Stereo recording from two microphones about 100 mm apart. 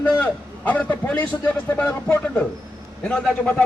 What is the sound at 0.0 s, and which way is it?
A man's voice, 15° left (ahead or behind).